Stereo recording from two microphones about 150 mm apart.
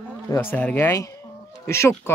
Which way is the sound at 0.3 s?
15° left (ahead or behind).